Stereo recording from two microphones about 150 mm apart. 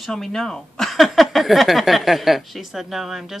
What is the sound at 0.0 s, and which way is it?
Speech, centre (ahead or behind).